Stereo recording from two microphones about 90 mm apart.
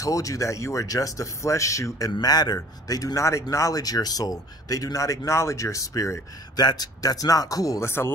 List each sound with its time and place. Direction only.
0.0 s speech: 40° left (ahead or behind)
2.1 s speech: 50° left (ahead or behind)
6.5 s speech: 50° left (ahead or behind)
7.8 s speech: 25° left (ahead or behind)